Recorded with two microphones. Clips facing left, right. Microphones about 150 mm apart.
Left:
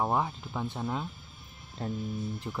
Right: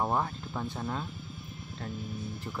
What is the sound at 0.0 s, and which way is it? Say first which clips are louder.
Speech: left 1 dB; 5° left (ahead or behind).